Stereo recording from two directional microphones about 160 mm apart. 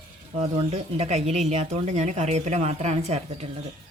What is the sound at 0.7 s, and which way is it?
Speech, 45° right (ahead or behind).